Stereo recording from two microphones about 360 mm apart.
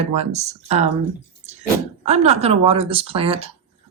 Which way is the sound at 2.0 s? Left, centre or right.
Centre.